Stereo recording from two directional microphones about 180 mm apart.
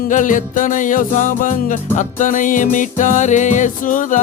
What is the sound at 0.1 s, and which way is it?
Music, 45° left (ahead or behind).